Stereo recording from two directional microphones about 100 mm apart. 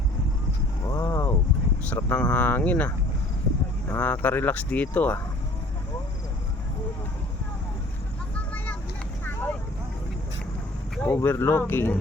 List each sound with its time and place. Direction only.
0.9 s vehicle: 30° left (ahead or behind)
2.0 s speech: 25° left (ahead or behind)
9.2 s vehicle: 20° left (ahead or behind)
11.0 s speech: 20° left (ahead or behind)